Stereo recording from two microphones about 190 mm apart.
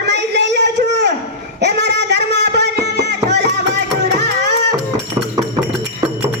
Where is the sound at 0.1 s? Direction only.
65° right (ahead or behind).